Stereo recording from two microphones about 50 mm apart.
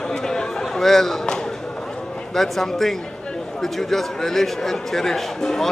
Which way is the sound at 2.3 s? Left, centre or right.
Centre.